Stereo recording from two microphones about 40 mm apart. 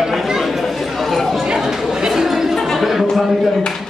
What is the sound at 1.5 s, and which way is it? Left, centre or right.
Chatter, centre.